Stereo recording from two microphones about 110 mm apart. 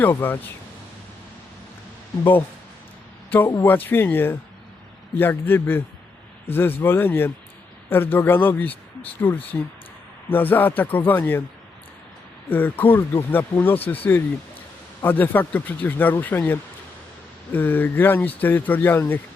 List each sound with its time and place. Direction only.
0.0 s speech: 20° left (ahead or behind)
3.2 s a man's voice: 15° left (ahead or behind)
12.5 s speech: 20° left (ahead or behind)